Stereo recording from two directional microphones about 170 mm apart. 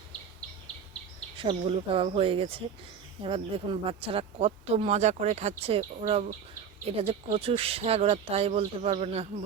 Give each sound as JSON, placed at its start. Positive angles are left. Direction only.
{"t": 1.4, "sound": "speech", "side_deg": -30}